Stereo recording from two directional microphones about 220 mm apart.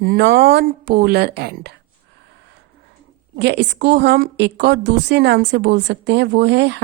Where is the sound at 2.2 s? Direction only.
50° right (ahead or behind).